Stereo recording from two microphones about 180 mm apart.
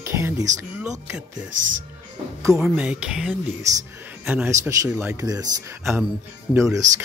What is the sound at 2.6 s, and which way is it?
Speech, 5° right (ahead or behind).